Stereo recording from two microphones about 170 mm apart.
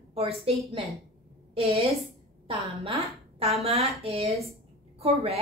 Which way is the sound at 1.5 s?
35° right (ahead or behind).